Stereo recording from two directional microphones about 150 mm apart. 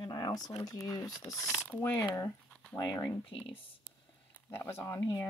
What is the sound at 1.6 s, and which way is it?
Coin, 15° left (ahead or behind).